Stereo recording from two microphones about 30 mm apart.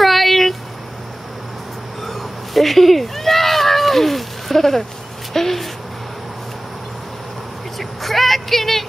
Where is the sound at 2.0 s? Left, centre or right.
Centre.